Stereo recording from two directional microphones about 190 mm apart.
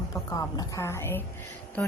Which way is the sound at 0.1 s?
20° left (ahead or behind).